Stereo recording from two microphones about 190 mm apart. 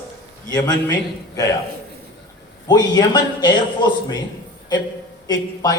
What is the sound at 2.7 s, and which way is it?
A man's voice, 20° left (ahead or behind).